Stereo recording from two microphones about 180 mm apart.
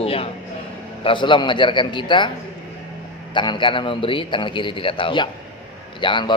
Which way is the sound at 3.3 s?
25° left (ahead or behind).